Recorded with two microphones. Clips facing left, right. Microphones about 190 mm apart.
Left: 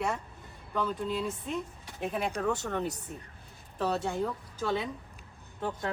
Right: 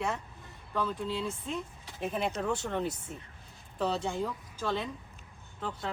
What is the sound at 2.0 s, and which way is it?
Speech, 10° left (ahead or behind).